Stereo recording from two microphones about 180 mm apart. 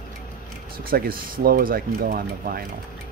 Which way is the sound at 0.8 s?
55° right (ahead or behind).